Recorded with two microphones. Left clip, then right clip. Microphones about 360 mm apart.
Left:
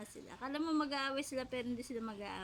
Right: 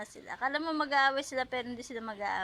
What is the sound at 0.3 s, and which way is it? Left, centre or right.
A woman's voice, centre.